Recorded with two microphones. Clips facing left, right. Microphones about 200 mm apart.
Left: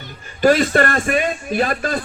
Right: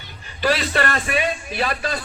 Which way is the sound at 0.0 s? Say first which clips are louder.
Left 8 dB; 50° left (ahead or behind).